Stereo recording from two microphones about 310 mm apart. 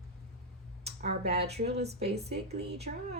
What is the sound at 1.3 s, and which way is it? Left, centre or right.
Speech, right.